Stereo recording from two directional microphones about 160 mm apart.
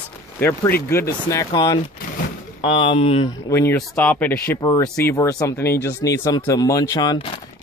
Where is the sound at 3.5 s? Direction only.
15° left (ahead or behind).